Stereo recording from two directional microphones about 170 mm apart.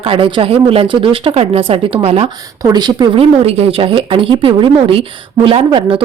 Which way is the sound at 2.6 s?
25° right (ahead or behind).